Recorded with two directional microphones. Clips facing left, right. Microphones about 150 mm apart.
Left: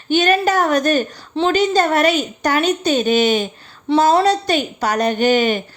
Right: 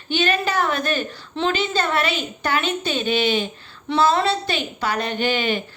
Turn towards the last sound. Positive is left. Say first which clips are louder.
# left 7 dB
turn(degrees=40)  # may be behind; listen again after turning